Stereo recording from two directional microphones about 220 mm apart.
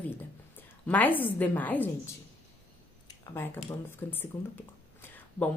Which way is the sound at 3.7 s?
10° left (ahead or behind).